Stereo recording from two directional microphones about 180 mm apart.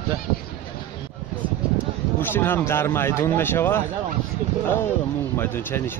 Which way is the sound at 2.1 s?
10° left (ahead or behind).